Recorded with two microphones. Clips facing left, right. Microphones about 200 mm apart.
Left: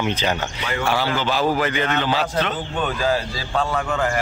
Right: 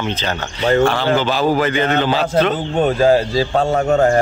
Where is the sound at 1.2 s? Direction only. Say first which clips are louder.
Right 4 dB; 30° right (ahead or behind).